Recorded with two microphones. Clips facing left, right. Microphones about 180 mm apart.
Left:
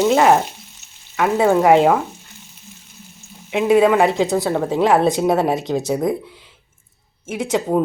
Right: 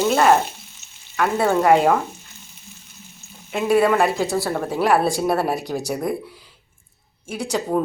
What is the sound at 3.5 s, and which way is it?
A woman's voice, 20° left (ahead or behind).